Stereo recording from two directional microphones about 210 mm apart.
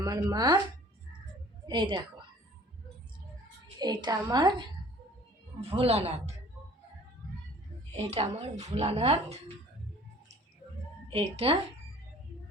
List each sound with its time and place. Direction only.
0.0 s speech: 15° right (ahead or behind)
1.6 s a woman's voice: 20° right (ahead or behind)
3.8 s a woman's voice: 20° right (ahead or behind)
7.9 s a woman's voice: 30° right (ahead or behind)
11.1 s a woman's voice: 30° right (ahead or behind)